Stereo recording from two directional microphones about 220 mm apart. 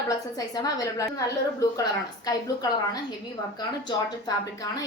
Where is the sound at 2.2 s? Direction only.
15° left (ahead or behind).